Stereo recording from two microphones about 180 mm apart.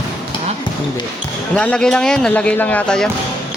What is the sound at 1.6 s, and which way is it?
Speech, 5° left (ahead or behind).